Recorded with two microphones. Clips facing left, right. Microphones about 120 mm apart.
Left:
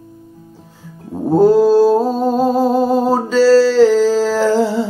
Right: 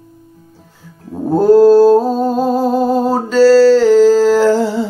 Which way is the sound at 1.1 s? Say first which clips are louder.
Right 2 dB; 5° left (ahead or behind).